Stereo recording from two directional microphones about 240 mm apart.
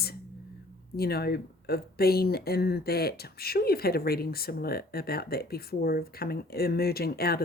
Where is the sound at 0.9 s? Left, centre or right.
Left.